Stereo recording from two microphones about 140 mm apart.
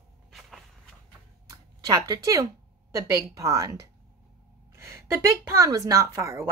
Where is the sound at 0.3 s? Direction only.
Centre (ahead or behind).